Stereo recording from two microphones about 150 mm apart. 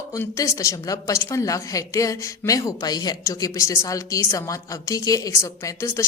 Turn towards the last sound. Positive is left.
turn(degrees=20)  # may be behind; listen again after turning